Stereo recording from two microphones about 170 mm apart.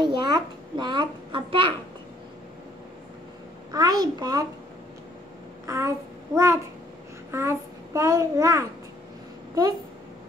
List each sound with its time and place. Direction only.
0.0 s a child's voice: 25° right (ahead or behind)
3.7 s a child's voice: 25° right (ahead or behind)
5.7 s child singing: 15° right (ahead or behind)
7.2 s a child's voice: 15° right (ahead or behind)